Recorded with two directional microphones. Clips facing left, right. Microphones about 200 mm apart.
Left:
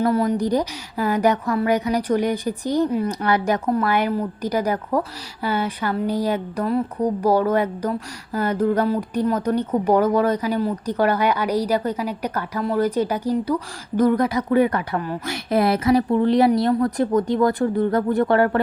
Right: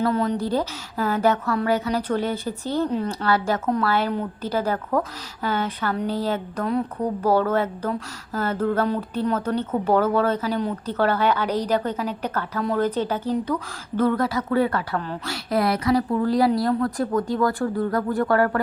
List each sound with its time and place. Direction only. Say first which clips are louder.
0.0 s a woman's voice: left 3 dB; 10° left (ahead or behind)
15.4 s speech: left 3 dB; 25° left (ahead or behind)